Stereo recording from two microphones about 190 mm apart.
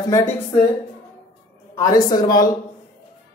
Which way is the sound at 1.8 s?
20° left (ahead or behind).